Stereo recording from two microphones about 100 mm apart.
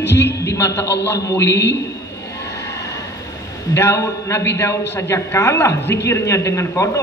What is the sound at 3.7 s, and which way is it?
A man's voice, 25° left (ahead or behind).